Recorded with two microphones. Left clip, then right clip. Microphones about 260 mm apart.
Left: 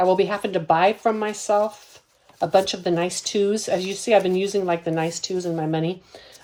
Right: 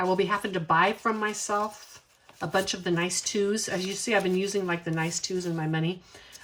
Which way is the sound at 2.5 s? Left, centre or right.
Centre.